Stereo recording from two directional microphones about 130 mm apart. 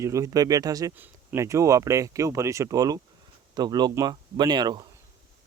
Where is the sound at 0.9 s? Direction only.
15° right (ahead or behind); by 4.9 s 35° right (ahead or behind).